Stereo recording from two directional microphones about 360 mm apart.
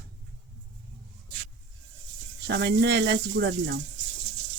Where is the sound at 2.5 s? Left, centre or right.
Right.